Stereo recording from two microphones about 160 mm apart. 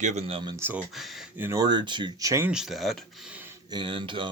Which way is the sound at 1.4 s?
15° right (ahead or behind).